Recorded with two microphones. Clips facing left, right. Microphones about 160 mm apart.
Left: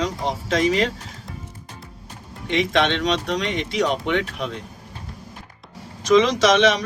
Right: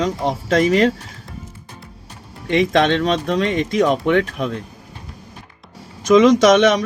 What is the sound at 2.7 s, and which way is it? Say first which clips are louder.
Speech: right 2 dB; 45° right (ahead or behind).